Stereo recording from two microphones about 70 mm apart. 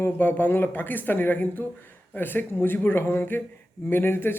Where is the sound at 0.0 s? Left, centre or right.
Left.